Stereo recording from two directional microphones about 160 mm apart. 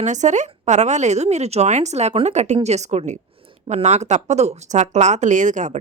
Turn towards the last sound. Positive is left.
turn(degrees=-50)  # may be behind; listen again after turning